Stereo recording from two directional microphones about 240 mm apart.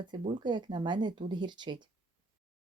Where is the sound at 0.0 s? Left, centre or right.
Centre.